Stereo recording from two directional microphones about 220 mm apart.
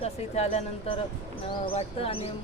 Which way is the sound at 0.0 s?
30° left (ahead or behind).